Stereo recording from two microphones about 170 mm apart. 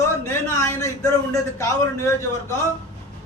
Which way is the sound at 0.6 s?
15° left (ahead or behind).